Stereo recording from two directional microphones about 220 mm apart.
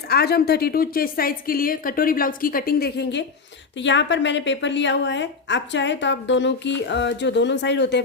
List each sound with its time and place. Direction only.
0.1 s a woman's voice: 45° left (ahead or behind)